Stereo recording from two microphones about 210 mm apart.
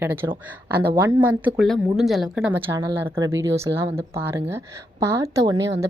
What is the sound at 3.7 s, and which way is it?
A woman's voice, 20° right (ahead or behind).